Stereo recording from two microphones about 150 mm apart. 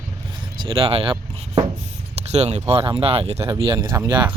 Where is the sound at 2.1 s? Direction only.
45° right (ahead or behind).